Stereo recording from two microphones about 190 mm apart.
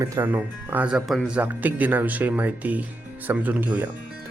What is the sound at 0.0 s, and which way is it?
Speech, 15° right (ahead or behind).